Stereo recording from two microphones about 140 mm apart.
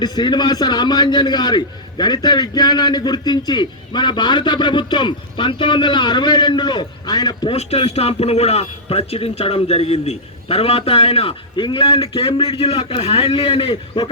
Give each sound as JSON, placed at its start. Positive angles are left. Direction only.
{"t": 0.0, "sound": "a man's voice", "side_deg": 30}
{"t": 7.5, "sound": "a man's voice", "side_deg": 50}